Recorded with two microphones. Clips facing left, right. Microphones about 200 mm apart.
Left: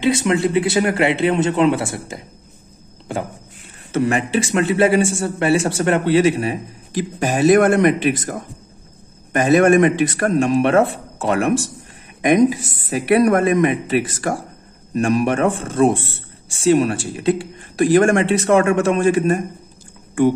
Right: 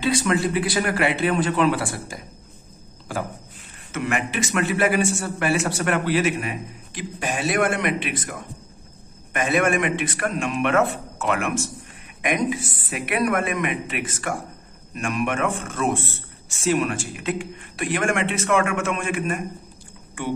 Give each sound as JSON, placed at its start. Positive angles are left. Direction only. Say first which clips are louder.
{"t": 0.0, "sound": "a man's voice", "louder": "left 4 dB", "side_deg": 25}